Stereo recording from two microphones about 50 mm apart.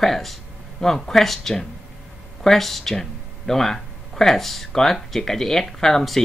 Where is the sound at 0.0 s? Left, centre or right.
Centre.